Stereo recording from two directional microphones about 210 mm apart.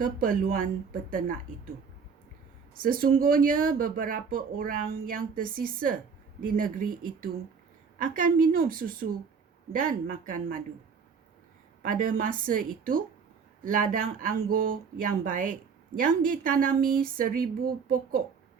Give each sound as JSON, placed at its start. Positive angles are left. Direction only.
{"t": 0.0, "sound": "speech", "side_deg": -40}
{"t": 2.7, "sound": "a woman's voice", "side_deg": -40}
{"t": 11.8, "sound": "a woman's voice", "side_deg": -40}